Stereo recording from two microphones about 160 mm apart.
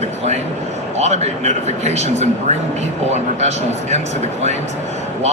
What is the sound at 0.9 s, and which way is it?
A man's voice, 45° right (ahead or behind).